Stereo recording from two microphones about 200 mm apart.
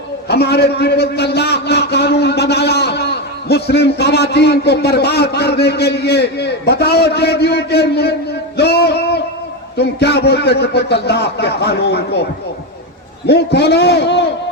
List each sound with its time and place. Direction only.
0.3 s a man's voice: 55° left (ahead or behind)
13.2 s a man's voice: 55° left (ahead or behind)